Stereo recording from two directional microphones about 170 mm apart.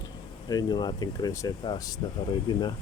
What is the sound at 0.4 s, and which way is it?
Speech, 25° left (ahead or behind).